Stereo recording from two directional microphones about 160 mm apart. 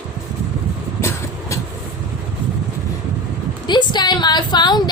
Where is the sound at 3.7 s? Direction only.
30° left (ahead or behind).